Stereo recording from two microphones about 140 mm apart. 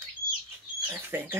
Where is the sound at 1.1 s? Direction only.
15° right (ahead or behind).